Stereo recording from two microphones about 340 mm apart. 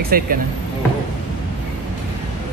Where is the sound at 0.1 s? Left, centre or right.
Right.